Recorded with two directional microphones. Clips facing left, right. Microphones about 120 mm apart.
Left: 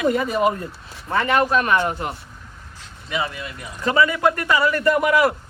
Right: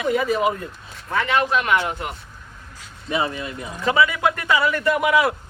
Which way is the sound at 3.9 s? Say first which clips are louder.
Left 1 dB; 5° right (ahead or behind).